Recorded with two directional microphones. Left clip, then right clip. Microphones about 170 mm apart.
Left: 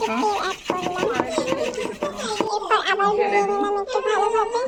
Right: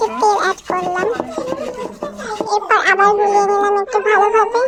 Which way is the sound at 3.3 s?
40° right (ahead or behind).